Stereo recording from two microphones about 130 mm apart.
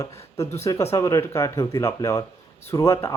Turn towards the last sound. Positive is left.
turn(degrees=20)  # may be behind; listen again after turning